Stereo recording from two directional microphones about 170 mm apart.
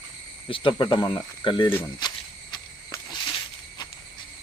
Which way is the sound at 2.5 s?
25° left (ahead or behind).